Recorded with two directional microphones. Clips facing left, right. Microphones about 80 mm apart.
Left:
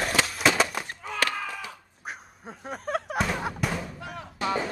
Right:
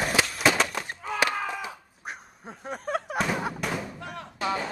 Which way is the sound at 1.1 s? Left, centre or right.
Centre.